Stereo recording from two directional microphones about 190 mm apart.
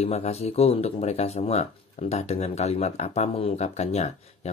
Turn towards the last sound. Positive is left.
turn(degrees=35)  # may be behind; listen again after turning